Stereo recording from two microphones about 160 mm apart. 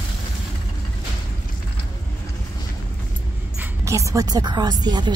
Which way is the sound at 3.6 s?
20° right (ahead or behind).